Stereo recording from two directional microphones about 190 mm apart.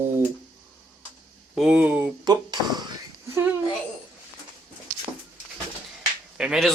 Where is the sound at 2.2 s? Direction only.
20° right (ahead or behind).